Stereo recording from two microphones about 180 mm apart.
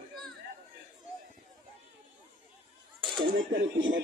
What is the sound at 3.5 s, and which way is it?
Speech, 90° right.